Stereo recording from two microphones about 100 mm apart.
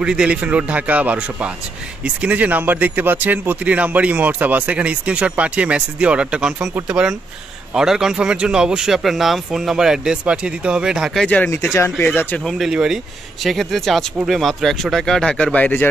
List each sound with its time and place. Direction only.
0.0 s speech: 10° right (ahead or behind)
11.1 s speech: 10° left (ahead or behind)
11.7 s speech: 25° left (ahead or behind)
12.4 s speech: centre (ahead or behind); by 15.9 s 15° left (ahead or behind)